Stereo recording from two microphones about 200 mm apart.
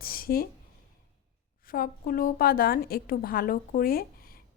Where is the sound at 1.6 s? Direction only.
45° left (ahead or behind).